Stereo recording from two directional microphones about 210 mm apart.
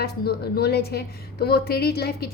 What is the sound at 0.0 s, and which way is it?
A woman's voice, 50° left (ahead or behind).